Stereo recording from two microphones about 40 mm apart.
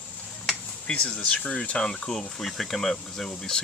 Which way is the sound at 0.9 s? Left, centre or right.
Left.